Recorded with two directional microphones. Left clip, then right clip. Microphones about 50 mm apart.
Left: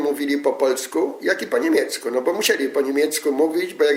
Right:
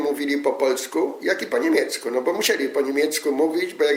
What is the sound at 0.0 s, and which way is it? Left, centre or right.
Speech, left.